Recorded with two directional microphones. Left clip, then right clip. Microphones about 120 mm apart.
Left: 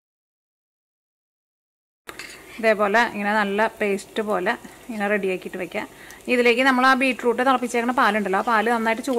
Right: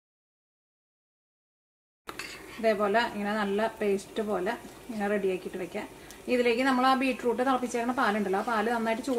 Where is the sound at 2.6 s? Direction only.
40° left (ahead or behind).